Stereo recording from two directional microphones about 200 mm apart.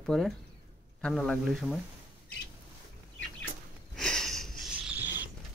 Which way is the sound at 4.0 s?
5° left (ahead or behind).